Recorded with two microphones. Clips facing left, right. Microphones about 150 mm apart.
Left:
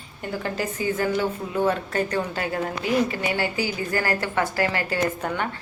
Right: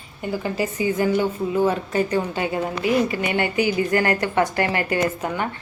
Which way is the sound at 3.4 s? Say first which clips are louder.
Right 5 dB; 20° right (ahead or behind).